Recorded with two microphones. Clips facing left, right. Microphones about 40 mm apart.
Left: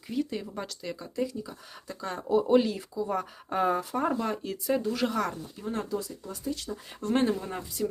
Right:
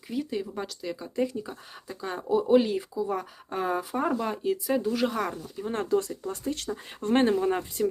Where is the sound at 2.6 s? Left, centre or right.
Centre.